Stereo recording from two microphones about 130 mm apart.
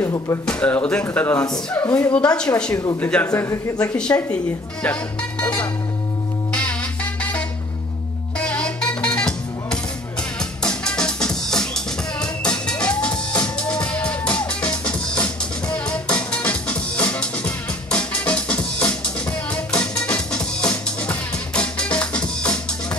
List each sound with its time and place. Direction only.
0.0 s speech: 25° left (ahead or behind)
0.5 s speech: 10° left (ahead or behind)
2.7 s speech: 30° left (ahead or behind)
3.0 s speech: 15° left (ahead or behind)
3.9 s speech: 10° left (ahead or behind)
5.4 s music: 10° left (ahead or behind)
8.4 s music: 10° left (ahead or behind)